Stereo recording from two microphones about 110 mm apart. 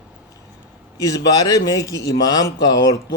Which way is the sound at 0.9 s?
30° left (ahead or behind).